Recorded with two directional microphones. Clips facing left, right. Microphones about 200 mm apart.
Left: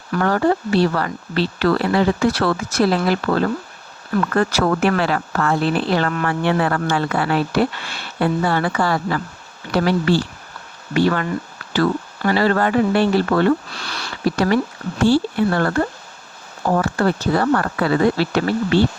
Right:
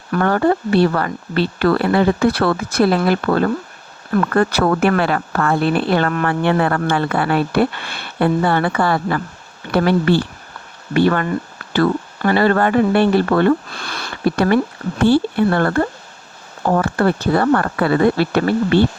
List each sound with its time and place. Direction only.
0.2 s speech: 55° right (ahead or behind)
16.7 s speech: 55° right (ahead or behind)